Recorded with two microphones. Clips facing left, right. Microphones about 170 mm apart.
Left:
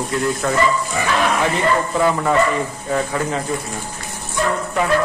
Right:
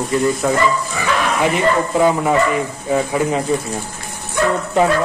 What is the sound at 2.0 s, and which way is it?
Speech, 20° right (ahead or behind).